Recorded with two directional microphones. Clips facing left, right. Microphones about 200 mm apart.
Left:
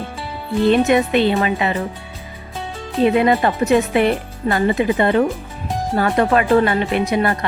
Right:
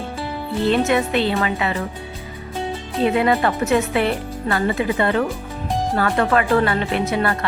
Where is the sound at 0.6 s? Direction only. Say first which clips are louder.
Left 4 dB; 15° left (ahead or behind).